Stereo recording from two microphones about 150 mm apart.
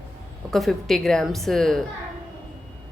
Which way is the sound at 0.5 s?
Centre (ahead or behind).